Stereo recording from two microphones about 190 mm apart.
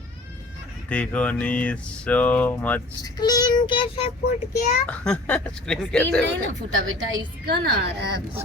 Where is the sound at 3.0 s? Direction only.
20° left (ahead or behind).